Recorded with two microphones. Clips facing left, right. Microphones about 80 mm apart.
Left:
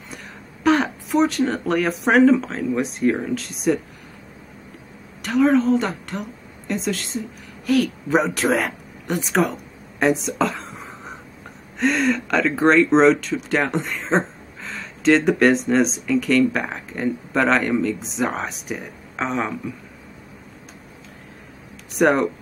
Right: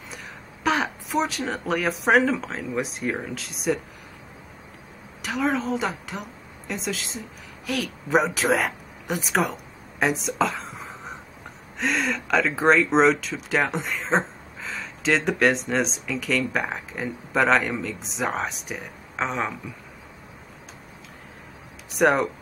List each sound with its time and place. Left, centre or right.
0.7 s speech: centre
5.2 s a woman's voice: centre
21.9 s speech: centre